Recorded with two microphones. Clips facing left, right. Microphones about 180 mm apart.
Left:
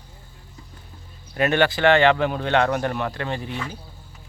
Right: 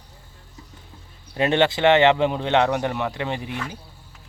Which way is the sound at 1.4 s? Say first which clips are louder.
Right 1 dB; 25° right (ahead or behind).